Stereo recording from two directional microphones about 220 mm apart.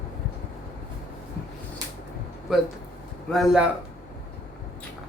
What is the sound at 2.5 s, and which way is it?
Speech, centre (ahead or behind).